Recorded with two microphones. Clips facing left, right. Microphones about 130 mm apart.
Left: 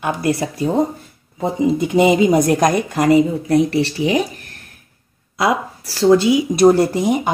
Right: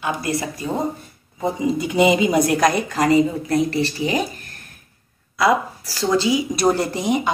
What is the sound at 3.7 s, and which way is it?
Speech, 75° left (ahead or behind).